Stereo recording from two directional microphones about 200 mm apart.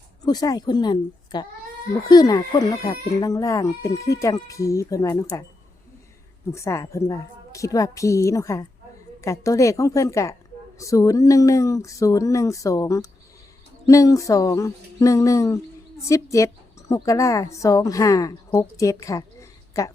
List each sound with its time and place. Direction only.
0.3 s a woman's voice: 20° left (ahead or behind)
6.5 s a woman's voice: 15° left (ahead or behind)